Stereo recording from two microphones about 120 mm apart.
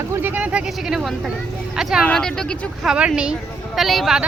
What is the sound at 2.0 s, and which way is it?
Speech, 5° left (ahead or behind).